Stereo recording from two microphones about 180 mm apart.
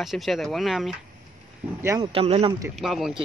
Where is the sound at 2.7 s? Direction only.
Centre (ahead or behind).